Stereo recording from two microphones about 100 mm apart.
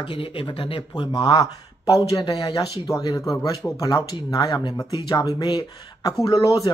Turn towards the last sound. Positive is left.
turn(degrees=35)  # may be behind; listen again after turning